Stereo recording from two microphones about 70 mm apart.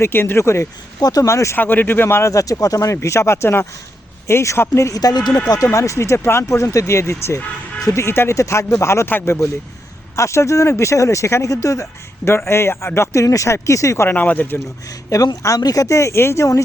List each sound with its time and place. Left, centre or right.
0.0 s speech: left
1.0 s speech: left
1.3 s speech: left
1.5 s speech: left
4.9 s speech: left
5.7 s speech: left
12.3 s speech: left
14.1 s speech: left
14.8 s speech: left